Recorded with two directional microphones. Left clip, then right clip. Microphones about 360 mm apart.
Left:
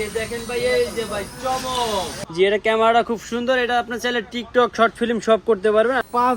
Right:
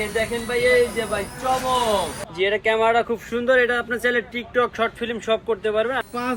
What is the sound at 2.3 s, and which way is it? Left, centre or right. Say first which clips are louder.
Speech: left 3 dB; left.